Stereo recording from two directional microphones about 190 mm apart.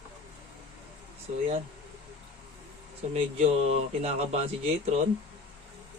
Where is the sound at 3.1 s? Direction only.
30° right (ahead or behind).